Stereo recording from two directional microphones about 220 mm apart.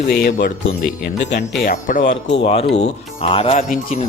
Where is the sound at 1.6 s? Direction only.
35° left (ahead or behind).